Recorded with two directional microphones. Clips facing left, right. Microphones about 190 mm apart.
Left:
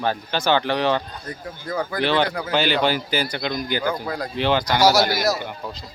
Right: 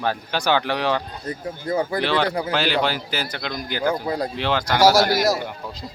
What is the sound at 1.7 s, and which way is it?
Speech, 25° right (ahead or behind).